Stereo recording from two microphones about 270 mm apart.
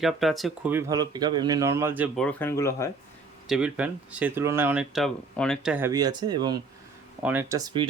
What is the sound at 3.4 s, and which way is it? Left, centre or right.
Speech, centre.